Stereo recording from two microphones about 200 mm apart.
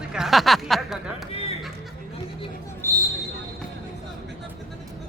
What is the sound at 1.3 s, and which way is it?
Music, 30° left (ahead or behind).